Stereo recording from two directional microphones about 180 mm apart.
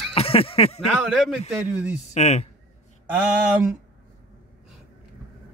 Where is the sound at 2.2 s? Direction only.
40° left (ahead or behind).